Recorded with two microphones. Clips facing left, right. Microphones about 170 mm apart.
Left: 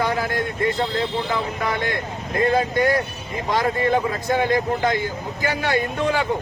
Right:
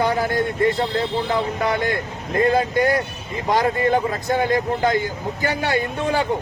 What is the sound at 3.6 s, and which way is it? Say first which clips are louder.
Speech: right 1 dB; 35° right (ahead or behind).